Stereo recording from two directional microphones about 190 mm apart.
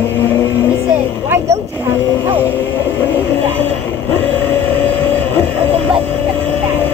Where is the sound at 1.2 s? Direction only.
15° right (ahead or behind).